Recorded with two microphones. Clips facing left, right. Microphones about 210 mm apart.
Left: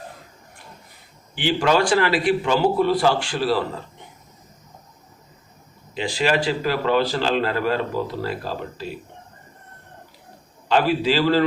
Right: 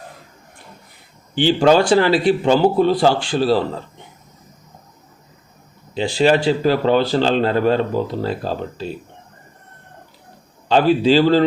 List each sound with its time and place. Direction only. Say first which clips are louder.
1.4 s speech: right 6 dB; 30° right (ahead or behind)
5.9 s speech: right 6 dB; 30° right (ahead or behind)
10.7 s speech: right 6 dB; 30° right (ahead or behind)